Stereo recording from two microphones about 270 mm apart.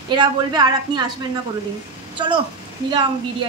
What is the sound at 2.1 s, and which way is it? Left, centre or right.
Speech, centre.